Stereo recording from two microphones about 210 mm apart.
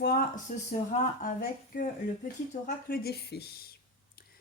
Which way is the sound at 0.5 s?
40° left (ahead or behind).